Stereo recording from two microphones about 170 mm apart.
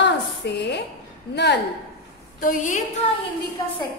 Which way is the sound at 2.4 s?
50° left (ahead or behind).